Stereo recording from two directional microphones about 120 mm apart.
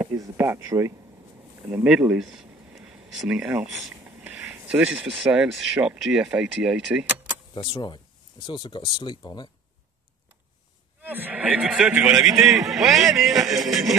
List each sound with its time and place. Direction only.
0.1 s speech: 25° right (ahead or behind)
1.7 s speech: 10° right (ahead or behind)
4.0 s a sound: 10° right (ahead or behind)
5.3 s a man's voice: 5° right (ahead or behind)
7.5 s speech: 40° left (ahead or behind)
11.0 s a man's voice: 15° right (ahead or behind)